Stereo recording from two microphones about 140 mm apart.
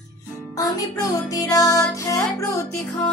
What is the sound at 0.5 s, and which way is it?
Music, 25° left (ahead or behind).